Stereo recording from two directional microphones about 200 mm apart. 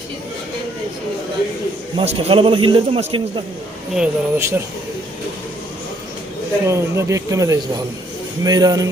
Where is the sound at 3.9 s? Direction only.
10° right (ahead or behind).